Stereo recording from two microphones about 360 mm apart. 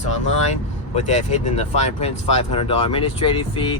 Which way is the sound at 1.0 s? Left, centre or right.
Centre.